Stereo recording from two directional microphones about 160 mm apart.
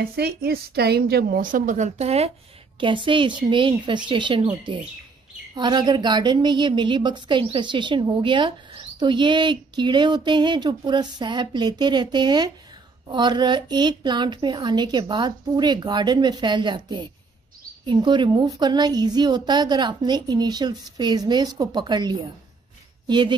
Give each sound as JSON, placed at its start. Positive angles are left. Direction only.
{"t": 0.0, "sound": "a woman's voice", "side_deg": -75}